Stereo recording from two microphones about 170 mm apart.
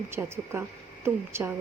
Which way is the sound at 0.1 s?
15° right (ahead or behind).